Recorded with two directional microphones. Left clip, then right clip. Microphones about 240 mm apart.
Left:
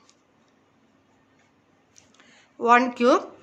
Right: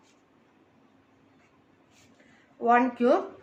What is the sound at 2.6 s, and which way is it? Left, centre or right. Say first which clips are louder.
Speech: left 4 dB; left.